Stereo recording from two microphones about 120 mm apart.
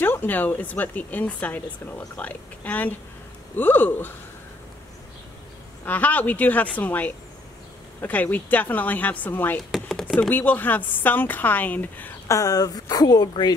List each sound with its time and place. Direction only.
0.0 s speech: 15° left (ahead or behind)
5.9 s speech: 15° left (ahead or behind)
9.7 s chopping: 5° left (ahead or behind)
10.3 s speech: 15° left (ahead or behind)
12.3 s a woman's voice: 30° left (ahead or behind)